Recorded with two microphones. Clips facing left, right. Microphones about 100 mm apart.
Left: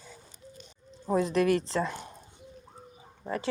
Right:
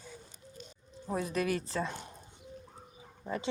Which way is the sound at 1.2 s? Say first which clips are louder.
Left 7 dB; 75° left (ahead or behind).